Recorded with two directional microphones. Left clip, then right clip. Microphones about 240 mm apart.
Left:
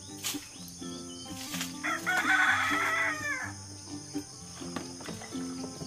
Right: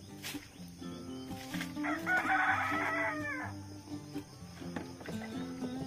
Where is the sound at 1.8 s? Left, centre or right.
Left.